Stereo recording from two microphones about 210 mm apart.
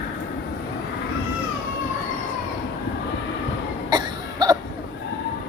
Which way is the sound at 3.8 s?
20° right (ahead or behind).